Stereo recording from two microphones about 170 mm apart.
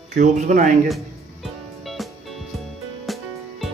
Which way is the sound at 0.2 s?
45° right (ahead or behind).